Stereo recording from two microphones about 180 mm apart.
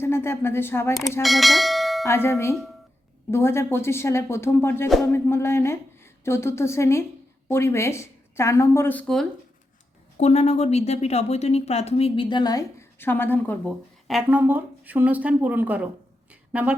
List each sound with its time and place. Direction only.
0.0 s a woman's voice: 15° left (ahead or behind)
1.2 s speech: centre (ahead or behind)
2.0 s a woman's voice: 15° left (ahead or behind)
10.2 s a woman's voice: 35° left (ahead or behind); by 13.7 s 10° left (ahead or behind)
14.1 s speech: 5° right (ahead or behind)
16.3 s a sound: 5° right (ahead or behind)